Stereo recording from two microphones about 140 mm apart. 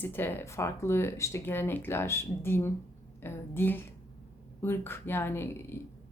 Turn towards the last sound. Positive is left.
turn(degrees=15)  # may be behind; listen again after turning